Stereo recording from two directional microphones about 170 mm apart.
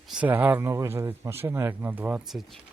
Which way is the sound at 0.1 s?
10° right (ahead or behind).